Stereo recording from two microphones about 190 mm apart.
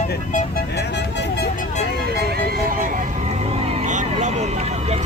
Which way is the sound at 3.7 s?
40° right (ahead or behind).